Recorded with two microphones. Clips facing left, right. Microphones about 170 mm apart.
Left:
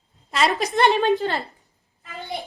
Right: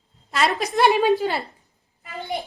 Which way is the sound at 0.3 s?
Centre (ahead or behind).